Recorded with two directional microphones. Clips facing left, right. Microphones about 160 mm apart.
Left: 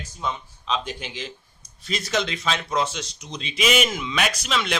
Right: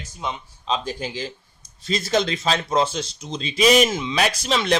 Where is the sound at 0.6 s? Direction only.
35° right (ahead or behind).